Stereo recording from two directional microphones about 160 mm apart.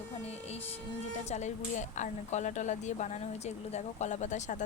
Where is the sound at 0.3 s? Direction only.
40° left (ahead or behind).